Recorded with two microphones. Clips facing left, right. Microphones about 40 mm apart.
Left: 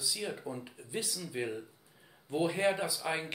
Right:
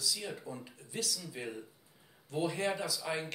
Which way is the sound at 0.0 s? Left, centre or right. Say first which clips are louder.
Left 2 dB; centre.